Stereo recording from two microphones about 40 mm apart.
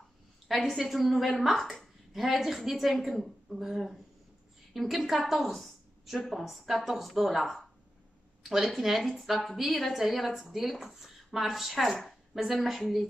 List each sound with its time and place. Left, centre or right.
0.5 s a woman's voice: centre